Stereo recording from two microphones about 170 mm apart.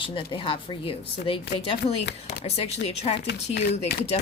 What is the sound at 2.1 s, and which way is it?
Speech, 75° left (ahead or behind).